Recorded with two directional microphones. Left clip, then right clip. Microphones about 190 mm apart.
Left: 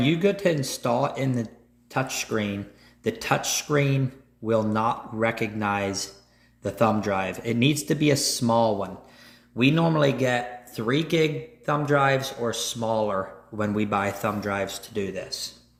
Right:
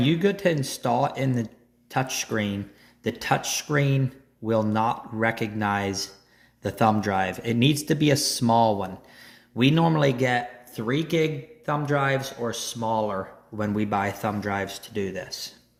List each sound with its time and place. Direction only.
0.0 s speech: 20° right (ahead or behind)
10.7 s a man's voice: centre (ahead or behind); by 15.5 s 25° right (ahead or behind)